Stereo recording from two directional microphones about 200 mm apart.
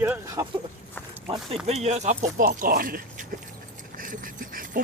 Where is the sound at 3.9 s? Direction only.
45° right (ahead or behind).